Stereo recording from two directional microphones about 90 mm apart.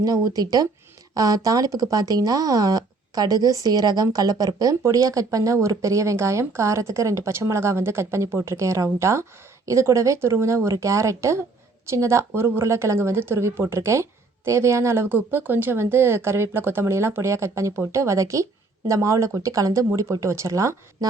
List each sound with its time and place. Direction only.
0.0 s a woman's voice: 45° right (ahead or behind)